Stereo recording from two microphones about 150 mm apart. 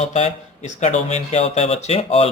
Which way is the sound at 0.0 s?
45° left (ahead or behind).